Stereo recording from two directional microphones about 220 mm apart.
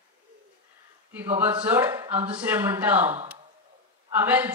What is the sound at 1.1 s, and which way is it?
A woman's voice, 10° right (ahead or behind).